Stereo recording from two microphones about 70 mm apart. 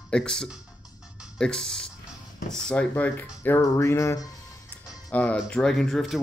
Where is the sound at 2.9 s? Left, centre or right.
Left.